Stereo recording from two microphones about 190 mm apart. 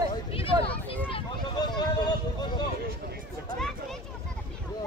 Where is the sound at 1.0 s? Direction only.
25° left (ahead or behind).